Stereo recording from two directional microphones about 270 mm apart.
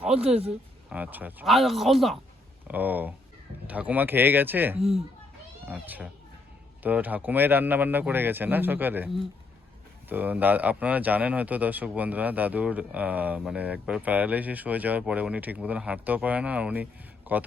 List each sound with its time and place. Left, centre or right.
0.0 s speech: centre
4.8 s speech: right
5.6 s speech: centre